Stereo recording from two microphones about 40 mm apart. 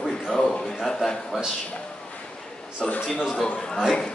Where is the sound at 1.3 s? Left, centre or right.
Centre.